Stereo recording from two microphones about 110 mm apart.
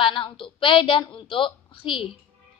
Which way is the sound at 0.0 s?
50° left (ahead or behind).